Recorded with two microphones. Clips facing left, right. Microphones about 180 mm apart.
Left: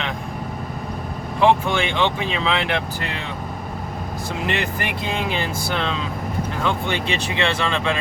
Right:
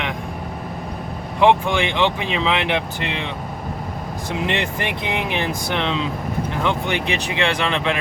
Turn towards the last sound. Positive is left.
turn(degrees=-20)  # may be behind; listen again after turning